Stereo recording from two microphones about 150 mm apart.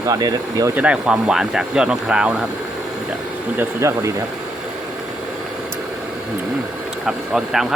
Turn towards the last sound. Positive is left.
turn(degrees=-5)  # may be behind; listen again after turning